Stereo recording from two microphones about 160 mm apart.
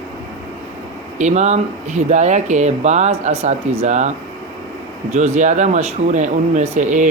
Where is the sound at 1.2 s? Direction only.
45° right (ahead or behind).